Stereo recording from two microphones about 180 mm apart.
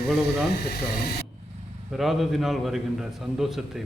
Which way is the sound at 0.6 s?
55° left (ahead or behind).